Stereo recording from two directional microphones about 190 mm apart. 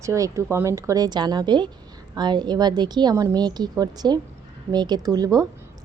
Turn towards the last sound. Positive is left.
turn(degrees=-20)  # may be behind; listen again after turning